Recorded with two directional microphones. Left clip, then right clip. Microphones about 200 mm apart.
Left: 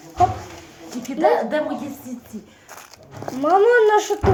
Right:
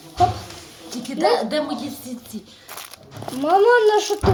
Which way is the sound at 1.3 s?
50° right (ahead or behind).